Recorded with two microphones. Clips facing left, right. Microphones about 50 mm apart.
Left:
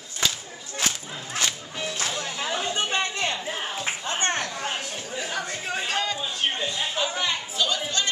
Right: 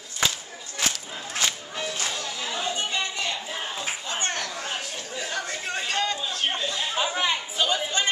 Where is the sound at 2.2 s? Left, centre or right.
Left.